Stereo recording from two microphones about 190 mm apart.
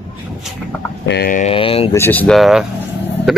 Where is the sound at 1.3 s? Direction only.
30° left (ahead or behind).